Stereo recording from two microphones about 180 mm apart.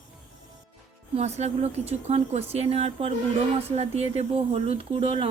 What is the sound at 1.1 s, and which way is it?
Speech, 40° right (ahead or behind).